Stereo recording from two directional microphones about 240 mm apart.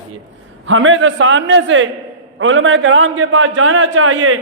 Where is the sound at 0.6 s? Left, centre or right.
Right.